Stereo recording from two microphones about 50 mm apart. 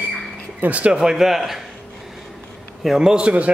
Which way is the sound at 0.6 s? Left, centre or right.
Right.